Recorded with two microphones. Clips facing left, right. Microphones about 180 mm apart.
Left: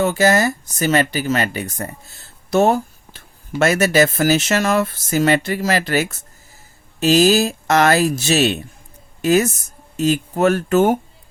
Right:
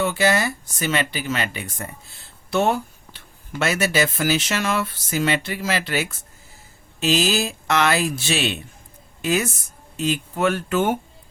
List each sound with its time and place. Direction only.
0.0 s speech: 45° left (ahead or behind)